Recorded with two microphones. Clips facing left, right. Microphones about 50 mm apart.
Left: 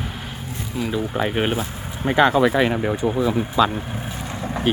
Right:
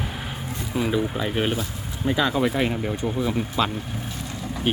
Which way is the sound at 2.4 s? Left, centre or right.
Left.